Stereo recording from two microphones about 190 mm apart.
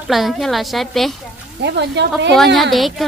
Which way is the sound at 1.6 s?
65° right (ahead or behind).